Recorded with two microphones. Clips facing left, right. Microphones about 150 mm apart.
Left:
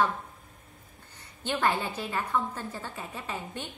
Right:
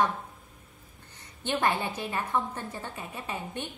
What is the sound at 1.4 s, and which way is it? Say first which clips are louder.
A woman's voice: even; 20° right (ahead or behind).